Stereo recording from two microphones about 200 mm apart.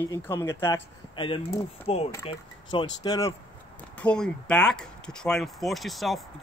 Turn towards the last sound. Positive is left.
turn(degrees=0)  # may be behind; listen again after turning